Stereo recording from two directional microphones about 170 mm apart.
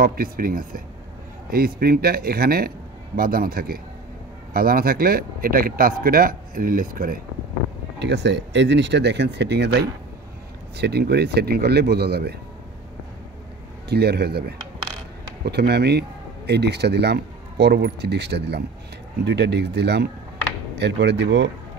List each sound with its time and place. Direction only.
0.0 s speech: 60° right (ahead or behind)
8.0 s a man's voice: 90° right; by 12.4 s 70° right (ahead or behind)
13.8 s a man's voice: 75° right (ahead or behind)
19.2 s speech: 90° right
20.7 s speech: 90° right